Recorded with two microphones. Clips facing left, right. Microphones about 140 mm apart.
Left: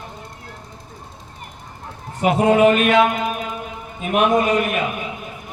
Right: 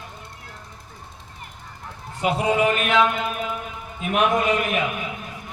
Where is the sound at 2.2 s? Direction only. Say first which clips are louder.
Left 6 dB; 55° left (ahead or behind).